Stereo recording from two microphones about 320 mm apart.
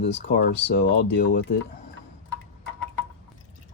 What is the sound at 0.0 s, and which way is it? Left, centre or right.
Speech, left.